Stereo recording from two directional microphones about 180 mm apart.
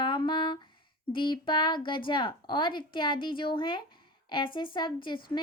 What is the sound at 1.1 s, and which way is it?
Speech, 25° left (ahead or behind).